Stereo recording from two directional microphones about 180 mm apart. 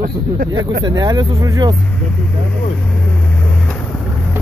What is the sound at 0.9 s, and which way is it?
Speech, 20° right (ahead or behind).